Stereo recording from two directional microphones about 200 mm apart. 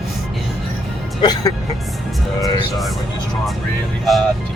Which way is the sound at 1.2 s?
20° left (ahead or behind).